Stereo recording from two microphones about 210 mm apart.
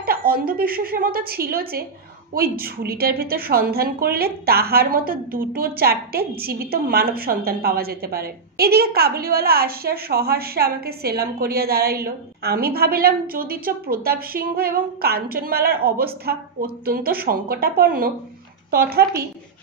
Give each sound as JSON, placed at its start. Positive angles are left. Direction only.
{"t": 0.0, "sound": "a woman's voice", "side_deg": -45}